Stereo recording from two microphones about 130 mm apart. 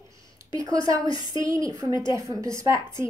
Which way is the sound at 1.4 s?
25° right (ahead or behind).